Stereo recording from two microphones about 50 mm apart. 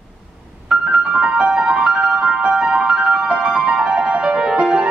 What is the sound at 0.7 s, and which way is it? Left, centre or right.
Music, centre.